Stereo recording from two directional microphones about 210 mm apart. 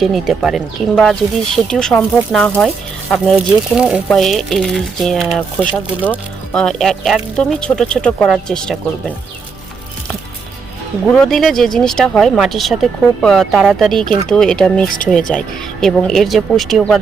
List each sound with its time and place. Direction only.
0.0 s speech: centre (ahead or behind)
11.1 s speech: 5° left (ahead or behind)
14.8 s speech: 40° left (ahead or behind)
15.3 s speech: 5° left (ahead or behind)